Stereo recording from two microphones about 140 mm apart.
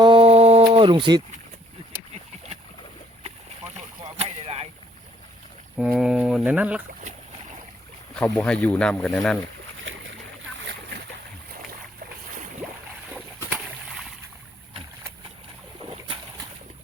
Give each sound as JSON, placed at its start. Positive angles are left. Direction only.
{"t": 0.0, "sound": "a sound", "side_deg": -40}
{"t": 4.2, "sound": "boat", "side_deg": -50}
{"t": 5.7, "sound": "boat", "side_deg": -5}
{"t": 8.1, "sound": "speech", "side_deg": 5}